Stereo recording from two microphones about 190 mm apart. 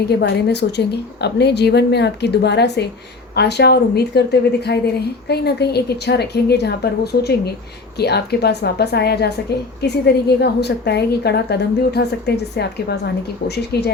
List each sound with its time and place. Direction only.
0.0 s a woman's voice: 60° left (ahead or behind)